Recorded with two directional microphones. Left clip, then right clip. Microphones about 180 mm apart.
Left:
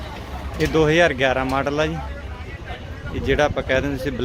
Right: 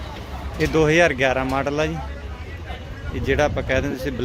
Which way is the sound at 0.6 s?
5° right (ahead or behind).